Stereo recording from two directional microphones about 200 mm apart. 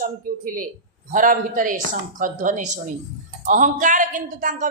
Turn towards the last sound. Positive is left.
turn(degrees=-40)  # may be behind; listen again after turning